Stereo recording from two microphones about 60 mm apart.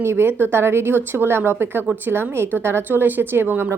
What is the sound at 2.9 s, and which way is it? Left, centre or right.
Speech, right.